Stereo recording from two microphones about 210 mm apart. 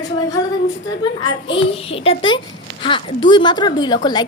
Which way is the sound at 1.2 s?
25° left (ahead or behind).